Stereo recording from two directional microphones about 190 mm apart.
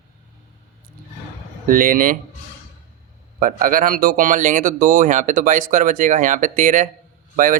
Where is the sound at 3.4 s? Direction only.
45° right (ahead or behind).